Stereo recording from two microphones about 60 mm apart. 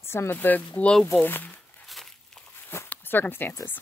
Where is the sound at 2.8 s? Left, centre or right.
Left.